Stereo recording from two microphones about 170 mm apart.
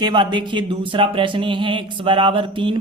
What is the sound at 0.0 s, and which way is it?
Speech, 25° right (ahead or behind).